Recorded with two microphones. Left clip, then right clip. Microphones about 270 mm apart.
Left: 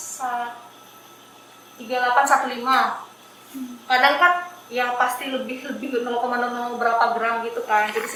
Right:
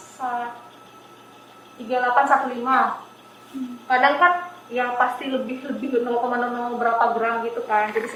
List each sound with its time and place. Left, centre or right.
0.2 s a woman's voice: centre
1.9 s a woman's voice: centre